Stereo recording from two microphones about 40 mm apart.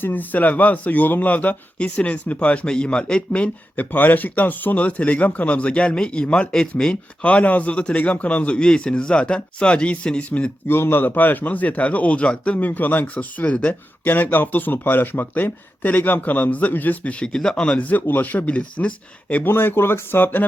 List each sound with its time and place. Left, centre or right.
0.0 s speech: left
3.8 s speech: left; by 6.9 s centre
7.2 s speech: left
10.7 s a man's voice: left
11.1 s speech: left
14.0 s speech: left
17.2 s speech: centre
17.5 s speech: left
18.0 s speech: left
19.5 s speech: left